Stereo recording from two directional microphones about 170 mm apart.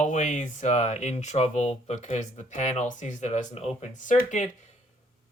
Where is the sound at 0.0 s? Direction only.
45° left (ahead or behind).